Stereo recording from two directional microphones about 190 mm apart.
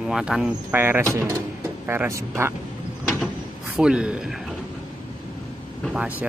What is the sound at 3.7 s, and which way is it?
Speech, 5° right (ahead or behind).